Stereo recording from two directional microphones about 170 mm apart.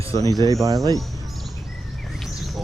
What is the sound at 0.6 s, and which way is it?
Speech, 20° right (ahead or behind).